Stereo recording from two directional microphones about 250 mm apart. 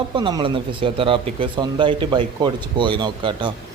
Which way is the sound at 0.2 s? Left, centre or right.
Centre.